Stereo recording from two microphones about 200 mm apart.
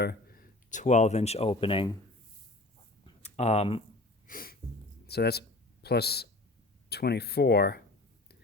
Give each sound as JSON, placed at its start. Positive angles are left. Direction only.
{"t": 0.0, "sound": "speech", "side_deg": 50}
{"t": 3.2, "sound": "speech", "side_deg": 30}
{"t": 4.3, "sound": "a sound", "side_deg": 45}
{"t": 6.9, "sound": "speech", "side_deg": 55}